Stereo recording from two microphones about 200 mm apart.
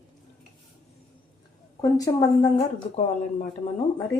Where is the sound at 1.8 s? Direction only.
15° left (ahead or behind).